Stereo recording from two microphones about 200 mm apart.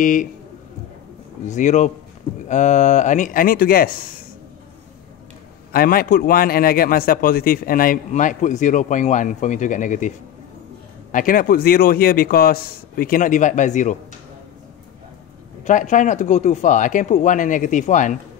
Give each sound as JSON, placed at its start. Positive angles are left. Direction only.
{"t": 0.0, "sound": "speech", "side_deg": 40}
{"t": 1.5, "sound": "speech", "side_deg": 35}
{"t": 5.7, "sound": "a man's voice", "side_deg": 45}
{"t": 15.6, "sound": "speech", "side_deg": 40}